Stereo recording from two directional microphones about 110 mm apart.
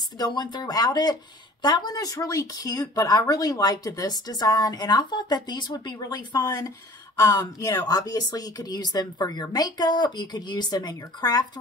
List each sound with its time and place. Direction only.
0.2 s speech: 40° left (ahead or behind)